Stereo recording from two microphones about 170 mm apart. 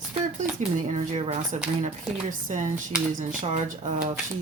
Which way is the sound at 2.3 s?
50° right (ahead or behind).